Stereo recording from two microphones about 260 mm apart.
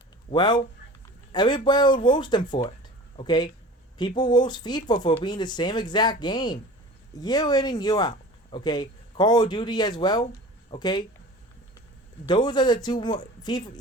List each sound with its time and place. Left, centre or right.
0.3 s speech: centre
12.3 s speech: centre